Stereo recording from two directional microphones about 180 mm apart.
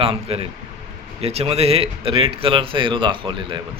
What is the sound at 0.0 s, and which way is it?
A man's voice, 30° right (ahead or behind).